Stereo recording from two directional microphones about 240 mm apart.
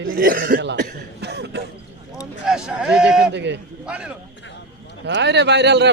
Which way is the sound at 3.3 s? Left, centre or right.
Right.